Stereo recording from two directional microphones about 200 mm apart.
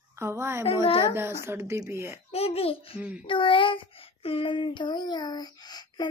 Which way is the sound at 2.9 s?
5° right (ahead or behind).